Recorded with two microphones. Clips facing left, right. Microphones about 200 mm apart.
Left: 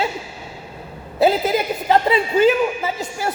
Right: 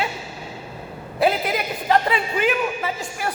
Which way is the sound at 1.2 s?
25° left (ahead or behind).